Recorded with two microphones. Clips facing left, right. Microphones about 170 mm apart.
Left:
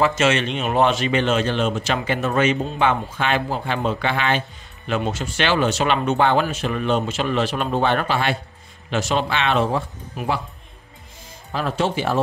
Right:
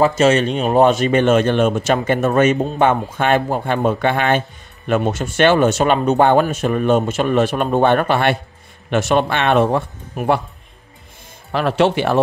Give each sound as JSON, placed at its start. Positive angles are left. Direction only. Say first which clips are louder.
{"t": 0.0, "sound": "speech", "louder": "right 5 dB", "side_deg": -40}
{"t": 11.5, "sound": "speech", "louder": "right 6 dB", "side_deg": -70}